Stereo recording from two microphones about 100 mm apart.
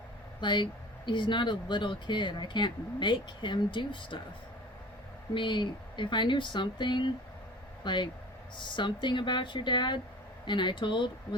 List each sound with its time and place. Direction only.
0.4 s speech: 50° left (ahead or behind)
5.3 s speech: 55° left (ahead or behind)